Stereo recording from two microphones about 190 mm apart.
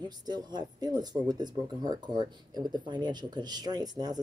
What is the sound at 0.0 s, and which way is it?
Speech, 20° right (ahead or behind).